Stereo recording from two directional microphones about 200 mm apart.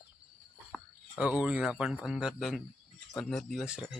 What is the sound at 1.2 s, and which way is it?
Speech, 5° right (ahead or behind).